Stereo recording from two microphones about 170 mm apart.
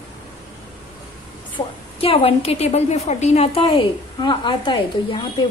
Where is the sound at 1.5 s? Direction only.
35° left (ahead or behind).